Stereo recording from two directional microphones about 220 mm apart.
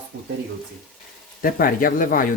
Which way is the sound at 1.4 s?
40° left (ahead or behind).